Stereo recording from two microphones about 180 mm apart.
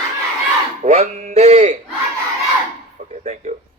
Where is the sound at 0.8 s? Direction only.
40° right (ahead or behind).